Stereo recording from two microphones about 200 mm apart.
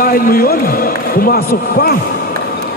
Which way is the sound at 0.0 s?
45° left (ahead or behind).